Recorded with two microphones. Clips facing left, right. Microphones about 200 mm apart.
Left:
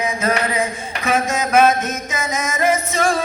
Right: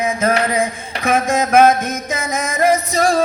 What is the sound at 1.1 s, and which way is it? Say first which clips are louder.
Mantra: right 3 dB; 55° right (ahead or behind).